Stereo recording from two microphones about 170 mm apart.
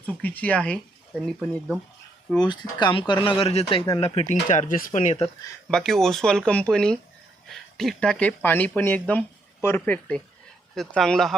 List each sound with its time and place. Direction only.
0.0 s speech: 10° left (ahead or behind)
2.4 s speech: 25° left (ahead or behind); by 5.1 s 50° left (ahead or behind)
5.7 s speech: centre (ahead or behind)